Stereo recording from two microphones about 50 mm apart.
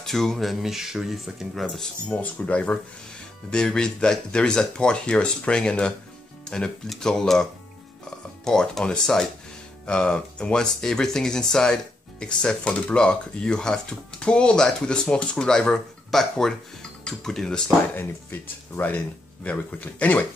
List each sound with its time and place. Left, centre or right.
0.0 s speech: centre
2.1 s speech: left
3.4 s speech: centre
8.5 s speech: centre
12.6 s speech: left
12.9 s speech: centre
17.9 s speech: left